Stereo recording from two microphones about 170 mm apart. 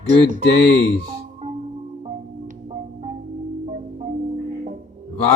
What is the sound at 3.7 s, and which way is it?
Marimba, 45° right (ahead or behind).